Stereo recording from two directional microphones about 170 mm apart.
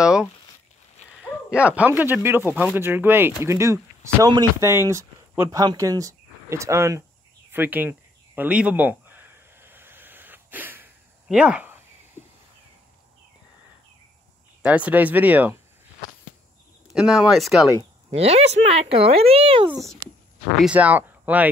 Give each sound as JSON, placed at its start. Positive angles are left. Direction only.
{"t": 0.0, "sound": "a sound", "side_deg": -5}
{"t": 1.5, "sound": "speech", "side_deg": -5}
{"t": 8.4, "sound": "a sound", "side_deg": -10}
{"t": 14.6, "sound": "speech", "side_deg": -10}
{"t": 16.9, "sound": "speech", "side_deg": -5}
{"t": 18.1, "sound": "speech", "side_deg": -35}
{"t": 20.5, "sound": "speech", "side_deg": -5}